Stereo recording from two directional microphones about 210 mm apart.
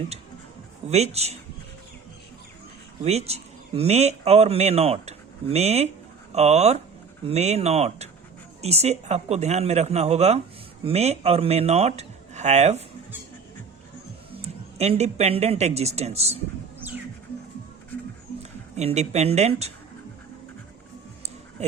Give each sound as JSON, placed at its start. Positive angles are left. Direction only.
{"t": 0.9, "sound": "speech", "side_deg": -30}
{"t": 3.0, "sound": "speech", "side_deg": -30}
{"t": 14.4, "sound": "speech", "side_deg": -30}
{"t": 16.8, "sound": "music", "side_deg": -10}
{"t": 18.8, "sound": "speech", "side_deg": -30}